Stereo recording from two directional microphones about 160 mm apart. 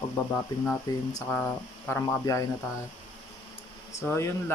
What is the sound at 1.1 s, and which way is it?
Speech, 15° left (ahead or behind).